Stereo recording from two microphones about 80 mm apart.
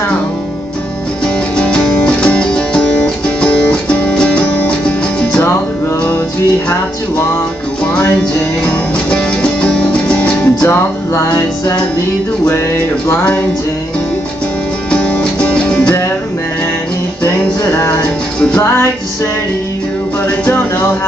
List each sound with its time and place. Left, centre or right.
1.2 s music: centre
9.1 s music: centre
11.1 s music: left
14.9 s music: centre